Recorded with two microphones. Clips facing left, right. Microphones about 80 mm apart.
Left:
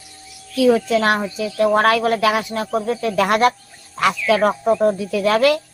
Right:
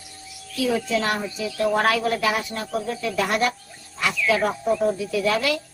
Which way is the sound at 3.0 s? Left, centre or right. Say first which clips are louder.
Left 7 dB; left.